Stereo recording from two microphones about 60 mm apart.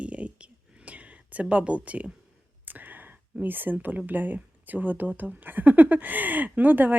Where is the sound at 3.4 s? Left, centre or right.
Right.